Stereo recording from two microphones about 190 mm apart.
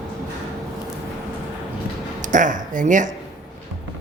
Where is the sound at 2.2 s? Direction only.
40° right (ahead or behind).